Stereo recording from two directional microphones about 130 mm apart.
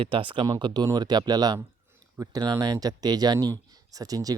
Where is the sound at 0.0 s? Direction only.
40° right (ahead or behind).